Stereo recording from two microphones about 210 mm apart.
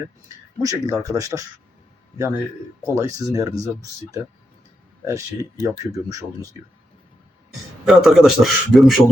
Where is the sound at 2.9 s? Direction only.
15° right (ahead or behind).